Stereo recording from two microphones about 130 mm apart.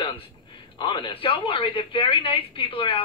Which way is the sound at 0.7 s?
40° left (ahead or behind).